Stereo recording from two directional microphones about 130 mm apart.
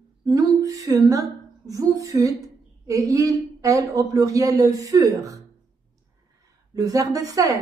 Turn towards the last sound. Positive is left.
turn(degrees=-25)  # may be behind; listen again after turning